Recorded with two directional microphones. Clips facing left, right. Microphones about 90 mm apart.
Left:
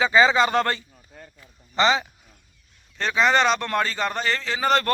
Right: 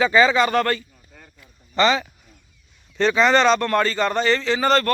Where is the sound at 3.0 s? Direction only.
5° left (ahead or behind).